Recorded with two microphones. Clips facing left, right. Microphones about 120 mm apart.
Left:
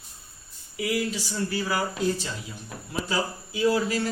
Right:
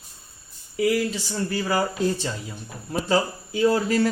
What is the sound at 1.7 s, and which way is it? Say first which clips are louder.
A man's voice: right 5 dB; 45° right (ahead or behind).